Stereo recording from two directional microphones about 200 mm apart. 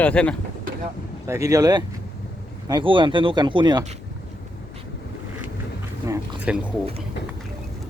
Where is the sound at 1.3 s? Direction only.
15° right (ahead or behind).